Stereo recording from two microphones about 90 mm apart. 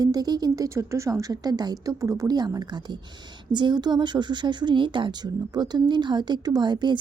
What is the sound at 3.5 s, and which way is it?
Speech, 60° right (ahead or behind).